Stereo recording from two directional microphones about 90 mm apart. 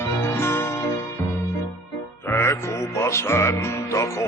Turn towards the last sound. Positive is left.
turn(degrees=30)  # may be behind; listen again after turning